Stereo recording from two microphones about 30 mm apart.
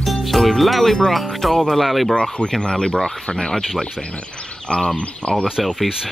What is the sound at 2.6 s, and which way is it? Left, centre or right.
Speech, left.